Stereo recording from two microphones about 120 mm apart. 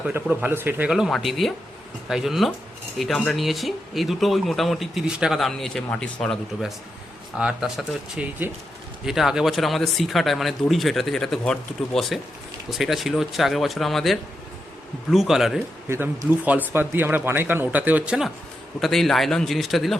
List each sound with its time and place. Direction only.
0.0 s speech: 10° right (ahead or behind)
0.9 s speech: 5° right (ahead or behind)
7.3 s speech: 5° right (ahead or behind)
15.9 s speech: 15° right (ahead or behind)
18.8 s speech: 5° left (ahead or behind)